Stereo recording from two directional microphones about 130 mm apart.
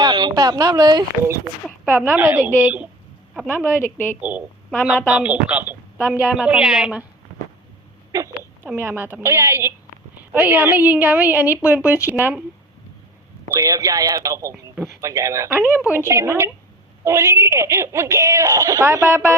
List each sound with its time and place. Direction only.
0.0 s a woman's voice: 35° right (ahead or behind)
1.9 s a woman's voice: 15° right (ahead or behind)
8.1 s a woman's voice: 20° right (ahead or behind)
13.6 s speech: 25° right (ahead or behind)